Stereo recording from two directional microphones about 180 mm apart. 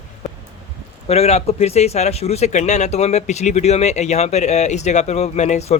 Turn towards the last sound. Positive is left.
turn(degrees=40)  # may be behind; listen again after turning